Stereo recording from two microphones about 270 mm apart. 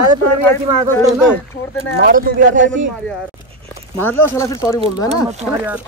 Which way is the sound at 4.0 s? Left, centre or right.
Centre.